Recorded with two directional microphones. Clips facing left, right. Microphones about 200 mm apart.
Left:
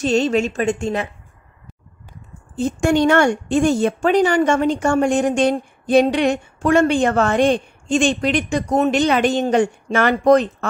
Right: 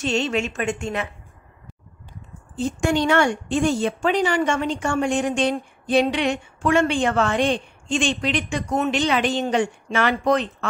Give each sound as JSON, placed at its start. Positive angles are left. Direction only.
{"t": 0.0, "sound": "a woman's voice", "side_deg": 40}
{"t": 2.5, "sound": "a woman's voice", "side_deg": 50}